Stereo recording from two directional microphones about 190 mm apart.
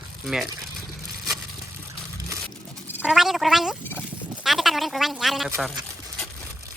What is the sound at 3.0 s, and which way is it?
Speech, centre (ahead or behind).